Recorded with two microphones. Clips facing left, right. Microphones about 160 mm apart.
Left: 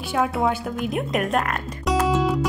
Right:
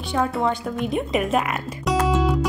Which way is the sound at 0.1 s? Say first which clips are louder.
Even; 5° left (ahead or behind).